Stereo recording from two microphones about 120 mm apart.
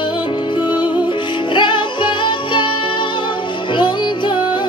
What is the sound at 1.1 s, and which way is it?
Music, 40° left (ahead or behind).